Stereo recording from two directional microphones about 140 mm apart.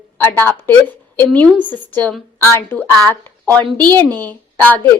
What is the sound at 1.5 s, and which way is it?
Speech, 10° right (ahead or behind).